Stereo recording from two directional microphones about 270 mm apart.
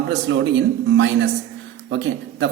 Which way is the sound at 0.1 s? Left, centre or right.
Right.